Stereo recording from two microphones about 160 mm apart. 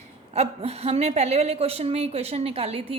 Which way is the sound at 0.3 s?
40° right (ahead or behind).